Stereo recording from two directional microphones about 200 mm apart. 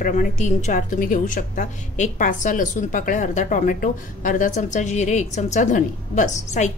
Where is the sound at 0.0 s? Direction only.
40° left (ahead or behind).